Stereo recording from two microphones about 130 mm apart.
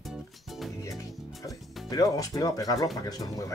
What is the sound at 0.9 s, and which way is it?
Speech, 25° left (ahead or behind).